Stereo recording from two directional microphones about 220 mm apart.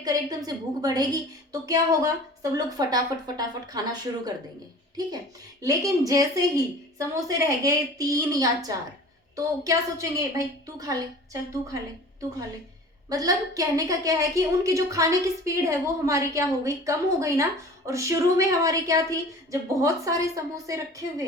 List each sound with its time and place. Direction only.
0.0 s a woman's voice: 15° right (ahead or behind)
5.6 s a woman's voice: 15° right (ahead or behind)
13.1 s a woman's voice: 15° right (ahead or behind)